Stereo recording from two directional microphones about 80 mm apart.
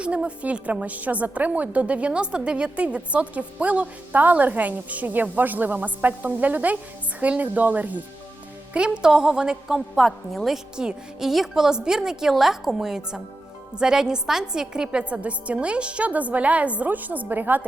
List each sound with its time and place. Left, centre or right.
0.0 s a woman's voice: centre